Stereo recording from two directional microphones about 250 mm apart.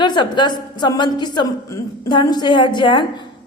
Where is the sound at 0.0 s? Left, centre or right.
Centre.